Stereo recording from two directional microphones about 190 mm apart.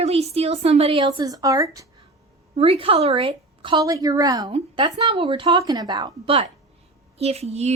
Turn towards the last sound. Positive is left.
turn(degrees=-35)  # may be behind; listen again after turning